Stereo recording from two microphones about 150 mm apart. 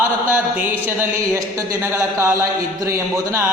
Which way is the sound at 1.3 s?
20° right (ahead or behind).